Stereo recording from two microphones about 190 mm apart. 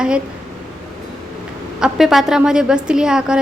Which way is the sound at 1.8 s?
Centre (ahead or behind).